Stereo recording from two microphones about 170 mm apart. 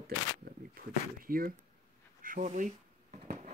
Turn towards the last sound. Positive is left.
turn(degrees=-45)  # may be behind; listen again after turning